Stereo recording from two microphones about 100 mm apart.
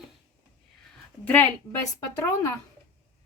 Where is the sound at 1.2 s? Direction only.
20° left (ahead or behind).